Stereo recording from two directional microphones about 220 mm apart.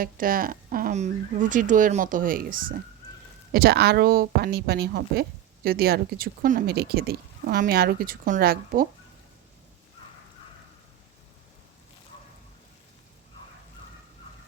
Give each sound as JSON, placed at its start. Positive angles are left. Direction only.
{"t": 0.0, "sound": "speech", "side_deg": -40}